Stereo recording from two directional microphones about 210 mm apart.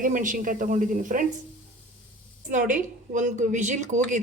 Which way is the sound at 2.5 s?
35° right (ahead or behind).